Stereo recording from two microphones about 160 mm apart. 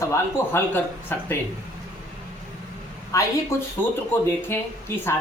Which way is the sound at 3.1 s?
20° left (ahead or behind).